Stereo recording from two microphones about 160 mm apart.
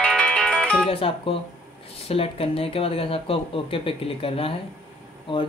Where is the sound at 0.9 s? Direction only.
35° left (ahead or behind).